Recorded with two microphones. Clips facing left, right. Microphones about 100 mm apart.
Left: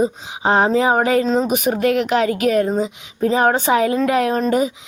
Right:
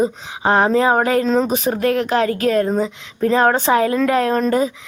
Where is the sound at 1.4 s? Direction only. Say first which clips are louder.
Even; 15° left (ahead or behind).